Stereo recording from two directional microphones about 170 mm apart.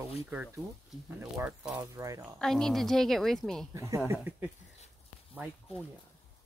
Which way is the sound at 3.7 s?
20° right (ahead or behind).